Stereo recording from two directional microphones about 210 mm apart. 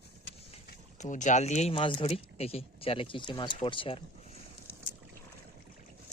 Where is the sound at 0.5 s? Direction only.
35° left (ahead or behind).